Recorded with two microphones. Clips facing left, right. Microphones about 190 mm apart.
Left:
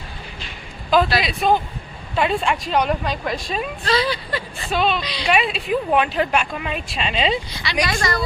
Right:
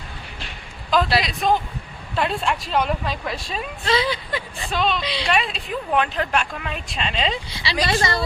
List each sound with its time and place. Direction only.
1.2 s a woman's voice: 5° left (ahead or behind)
3.8 s speech: 20° right (ahead or behind)
4.7 s a woman's voice: 5° left (ahead or behind)
7.6 s speech: 25° right (ahead or behind)